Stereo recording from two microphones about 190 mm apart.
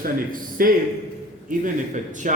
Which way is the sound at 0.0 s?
50° right (ahead or behind).